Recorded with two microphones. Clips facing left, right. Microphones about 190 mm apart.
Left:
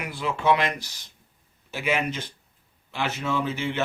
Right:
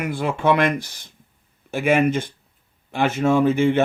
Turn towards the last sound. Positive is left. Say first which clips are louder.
# right 10 dB
turn(degrees=-50)  # may be behind; listen again after turning